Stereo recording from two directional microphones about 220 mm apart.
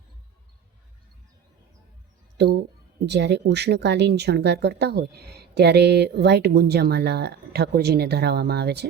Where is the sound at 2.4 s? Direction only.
50° right (ahead or behind).